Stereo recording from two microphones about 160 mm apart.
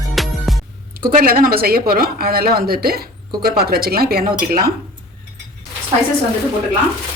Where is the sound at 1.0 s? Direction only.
65° right (ahead or behind).